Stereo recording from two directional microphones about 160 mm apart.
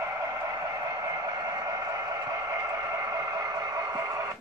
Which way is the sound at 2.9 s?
20° right (ahead or behind).